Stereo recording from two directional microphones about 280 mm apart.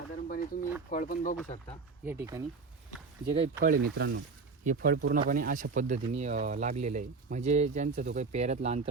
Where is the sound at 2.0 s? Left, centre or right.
Centre.